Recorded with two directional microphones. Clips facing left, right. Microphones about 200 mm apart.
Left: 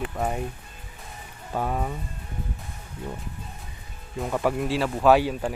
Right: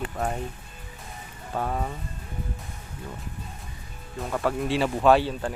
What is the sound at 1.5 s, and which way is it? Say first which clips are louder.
Speech: left 1 dB; 5° left (ahead or behind).